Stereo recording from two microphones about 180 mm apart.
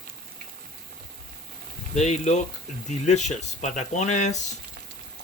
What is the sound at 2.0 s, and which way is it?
Speech, 40° left (ahead or behind).